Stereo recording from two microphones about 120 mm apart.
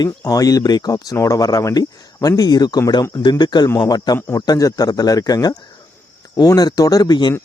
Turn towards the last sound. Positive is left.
turn(degrees=35)  # may be behind; listen again after turning